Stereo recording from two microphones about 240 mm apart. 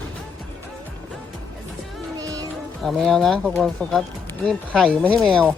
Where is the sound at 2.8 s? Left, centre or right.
Centre.